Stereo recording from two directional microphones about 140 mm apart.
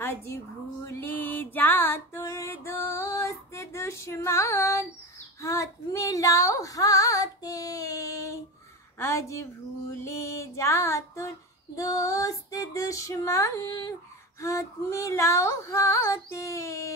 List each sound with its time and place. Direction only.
0.0 s a woman's voice: 15° left (ahead or behind)
0.8 s music: 15° left (ahead or behind)
5.4 s female singing: 20° left (ahead or behind)